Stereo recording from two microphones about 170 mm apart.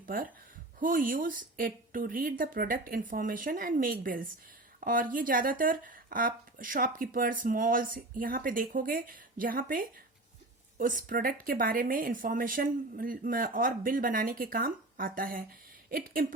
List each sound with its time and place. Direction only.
0.0 s a woman's voice: 55° right (ahead or behind)